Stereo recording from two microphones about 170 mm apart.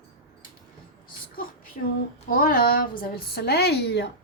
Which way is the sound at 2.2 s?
60° left (ahead or behind).